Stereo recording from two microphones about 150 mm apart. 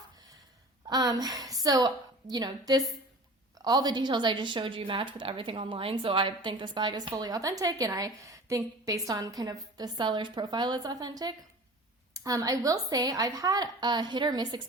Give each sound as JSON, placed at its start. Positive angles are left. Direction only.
{"t": 0.9, "sound": "a woman's voice", "side_deg": -25}